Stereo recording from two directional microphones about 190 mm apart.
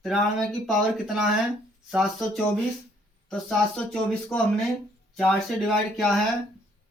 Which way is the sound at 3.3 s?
5° left (ahead or behind).